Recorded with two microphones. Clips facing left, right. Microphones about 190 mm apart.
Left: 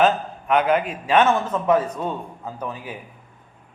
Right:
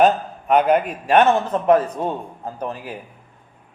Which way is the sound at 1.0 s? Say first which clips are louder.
Right 2 dB; 60° right (ahead or behind).